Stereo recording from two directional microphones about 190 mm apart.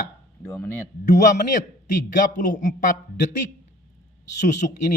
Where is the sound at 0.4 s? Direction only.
5° left (ahead or behind).